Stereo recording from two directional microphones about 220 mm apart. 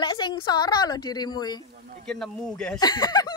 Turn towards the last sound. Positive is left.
turn(degrees=20)  # may be behind; listen again after turning